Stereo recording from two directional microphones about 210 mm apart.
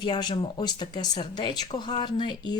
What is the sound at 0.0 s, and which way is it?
Speech, 20° left (ahead or behind).